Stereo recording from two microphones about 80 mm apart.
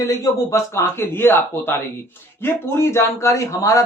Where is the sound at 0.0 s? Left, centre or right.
Left.